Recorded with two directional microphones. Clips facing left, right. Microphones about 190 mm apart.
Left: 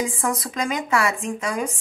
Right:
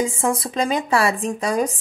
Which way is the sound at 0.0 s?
25° right (ahead or behind).